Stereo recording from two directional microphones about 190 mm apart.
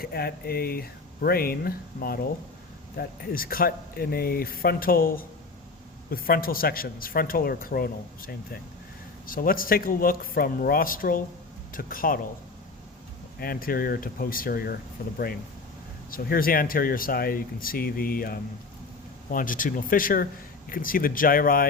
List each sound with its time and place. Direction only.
0.0 s speech: 55° left (ahead or behind)
13.4 s speech: 50° left (ahead or behind)